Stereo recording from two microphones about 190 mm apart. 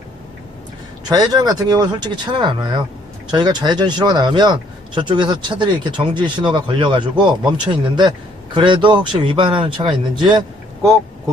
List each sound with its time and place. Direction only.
1.1 s speech: 20° right (ahead or behind)